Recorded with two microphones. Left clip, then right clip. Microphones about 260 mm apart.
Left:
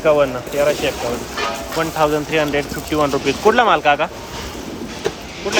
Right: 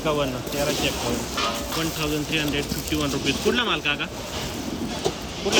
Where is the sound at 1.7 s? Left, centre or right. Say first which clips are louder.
Left 9 dB; centre.